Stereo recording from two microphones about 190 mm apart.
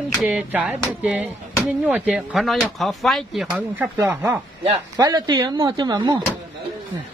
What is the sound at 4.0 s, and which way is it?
Speech, 15° right (ahead or behind).